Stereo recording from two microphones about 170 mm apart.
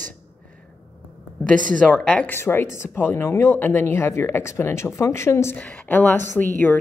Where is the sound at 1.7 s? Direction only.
5° left (ahead or behind).